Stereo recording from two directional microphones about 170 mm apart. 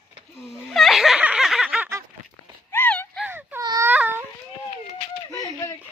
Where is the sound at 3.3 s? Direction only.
15° right (ahead or behind).